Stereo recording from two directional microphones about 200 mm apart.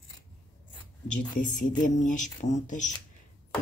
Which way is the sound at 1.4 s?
40° left (ahead or behind).